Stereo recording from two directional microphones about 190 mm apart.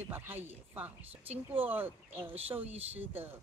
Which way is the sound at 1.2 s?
30° right (ahead or behind).